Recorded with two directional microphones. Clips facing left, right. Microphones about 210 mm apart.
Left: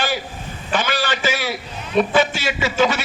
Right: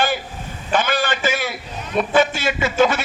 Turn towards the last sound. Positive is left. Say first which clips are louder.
# right 2 dB
turn(degrees=-50)  # may be behind; listen again after turning